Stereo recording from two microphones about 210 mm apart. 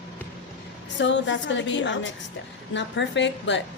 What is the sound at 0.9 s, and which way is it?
A woman's voice, 60° left (ahead or behind).